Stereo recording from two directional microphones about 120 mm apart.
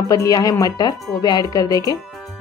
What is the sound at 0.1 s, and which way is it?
Speech, 30° left (ahead or behind).